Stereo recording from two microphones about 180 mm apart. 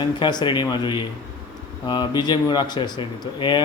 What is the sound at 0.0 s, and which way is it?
Speech, 25° left (ahead or behind).